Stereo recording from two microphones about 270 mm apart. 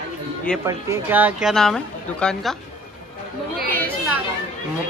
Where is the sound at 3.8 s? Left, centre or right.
Centre.